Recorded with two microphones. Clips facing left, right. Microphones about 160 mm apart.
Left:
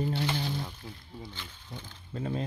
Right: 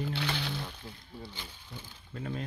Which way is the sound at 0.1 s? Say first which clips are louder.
Left 3 dB; 75° right (ahead or behind).